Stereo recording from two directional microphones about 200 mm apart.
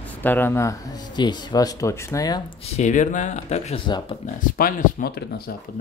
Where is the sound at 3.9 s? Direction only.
20° left (ahead or behind).